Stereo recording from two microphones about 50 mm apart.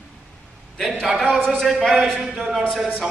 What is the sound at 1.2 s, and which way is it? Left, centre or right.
Speech, centre.